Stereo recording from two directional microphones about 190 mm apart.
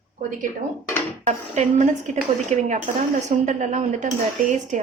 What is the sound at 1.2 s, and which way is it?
A woman's voice, 40° right (ahead or behind).